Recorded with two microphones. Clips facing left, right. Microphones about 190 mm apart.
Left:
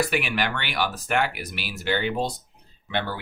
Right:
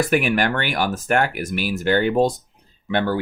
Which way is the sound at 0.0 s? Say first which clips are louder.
Right 6 dB; 45° right (ahead or behind).